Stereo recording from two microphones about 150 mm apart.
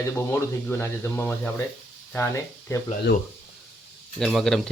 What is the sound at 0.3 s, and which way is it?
Speech, 15° left (ahead or behind).